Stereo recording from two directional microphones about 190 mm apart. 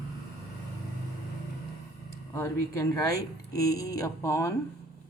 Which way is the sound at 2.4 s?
20° left (ahead or behind).